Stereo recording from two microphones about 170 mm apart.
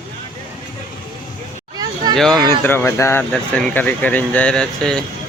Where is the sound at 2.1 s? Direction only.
Centre (ahead or behind).